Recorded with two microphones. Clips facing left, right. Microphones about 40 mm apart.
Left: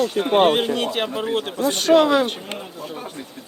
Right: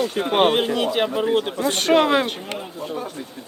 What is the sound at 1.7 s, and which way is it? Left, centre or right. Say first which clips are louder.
Speech: left 2 dB; right.